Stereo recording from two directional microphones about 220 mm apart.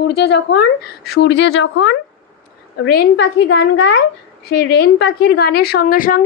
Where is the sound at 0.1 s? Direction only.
50° left (ahead or behind).